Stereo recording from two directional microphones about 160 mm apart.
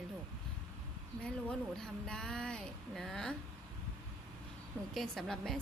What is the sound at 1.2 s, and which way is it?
A woman's voice, 5° left (ahead or behind).